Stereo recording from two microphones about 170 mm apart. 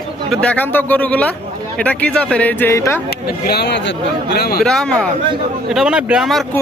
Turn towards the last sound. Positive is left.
turn(degrees=0)  # may be behind; listen again after turning